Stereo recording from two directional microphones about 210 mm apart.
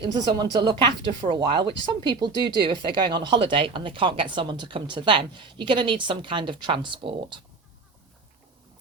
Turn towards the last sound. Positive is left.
turn(degrees=-25)  # may be behind; listen again after turning